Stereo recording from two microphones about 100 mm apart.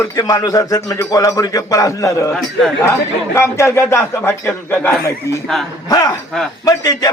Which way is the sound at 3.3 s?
25° left (ahead or behind).